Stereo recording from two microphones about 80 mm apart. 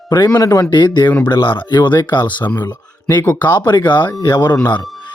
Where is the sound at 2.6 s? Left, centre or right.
Left.